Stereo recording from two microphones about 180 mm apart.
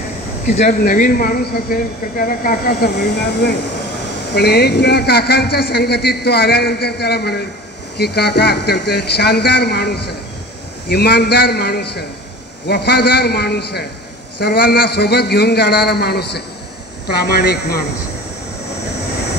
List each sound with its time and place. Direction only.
0.8 s a man's voice: 50° left (ahead or behind)